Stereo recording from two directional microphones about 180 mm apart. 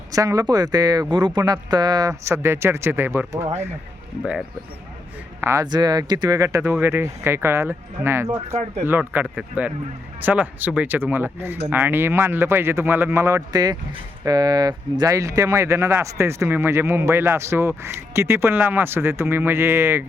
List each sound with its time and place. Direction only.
0.1 s speech: 20° right (ahead or behind)
5.4 s speech: 15° right (ahead or behind)
8.5 s speech: 35° right (ahead or behind)
8.9 s speech: 10° right (ahead or behind)